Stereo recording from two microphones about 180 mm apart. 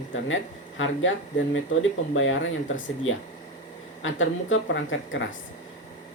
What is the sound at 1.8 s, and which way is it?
Speech, 90° left.